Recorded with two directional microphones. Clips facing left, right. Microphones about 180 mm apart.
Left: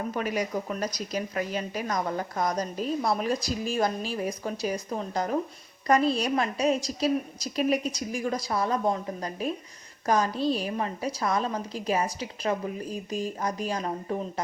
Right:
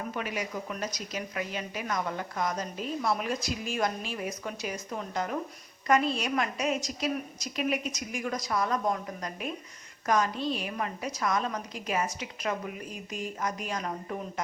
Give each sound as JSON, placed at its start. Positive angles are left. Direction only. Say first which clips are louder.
{"t": 0.1, "sound": "a woman's voice", "louder": "left 5 dB", "side_deg": 40}